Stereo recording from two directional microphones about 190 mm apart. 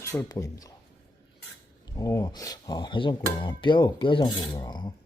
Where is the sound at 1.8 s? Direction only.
20° left (ahead or behind).